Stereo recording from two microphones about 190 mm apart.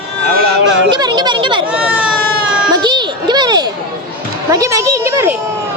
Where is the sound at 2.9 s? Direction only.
25° right (ahead or behind).